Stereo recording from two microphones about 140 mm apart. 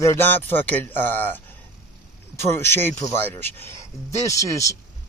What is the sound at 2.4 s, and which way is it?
Speech, 15° left (ahead or behind).